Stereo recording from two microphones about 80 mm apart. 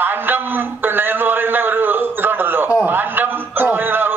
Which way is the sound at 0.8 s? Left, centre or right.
Right.